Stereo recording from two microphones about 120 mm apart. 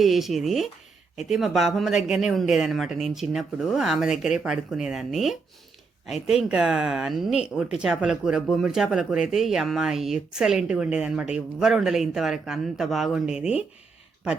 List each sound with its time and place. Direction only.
0.0 s speech: centre (ahead or behind)